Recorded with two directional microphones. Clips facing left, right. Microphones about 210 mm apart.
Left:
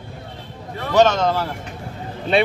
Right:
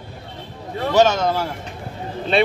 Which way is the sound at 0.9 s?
5° right (ahead or behind).